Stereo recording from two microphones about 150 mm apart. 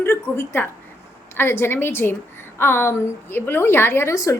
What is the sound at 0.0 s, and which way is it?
A woman's voice, 15° left (ahead or behind).